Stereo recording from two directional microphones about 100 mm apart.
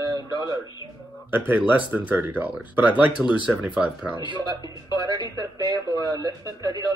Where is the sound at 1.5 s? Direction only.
15° right (ahead or behind).